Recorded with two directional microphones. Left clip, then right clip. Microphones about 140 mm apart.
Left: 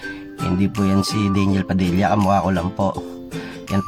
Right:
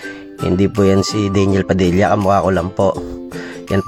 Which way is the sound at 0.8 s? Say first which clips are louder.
Right 5 dB; 40° right (ahead or behind).